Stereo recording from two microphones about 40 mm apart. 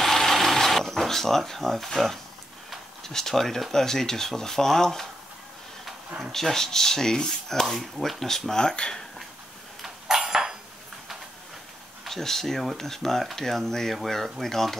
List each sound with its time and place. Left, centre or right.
0.0 s sewing machine: centre
3.0 s speech: centre
6.3 s speech: centre
7.6 s speech: centre
9.8 s a sound: centre
12.1 s speech: centre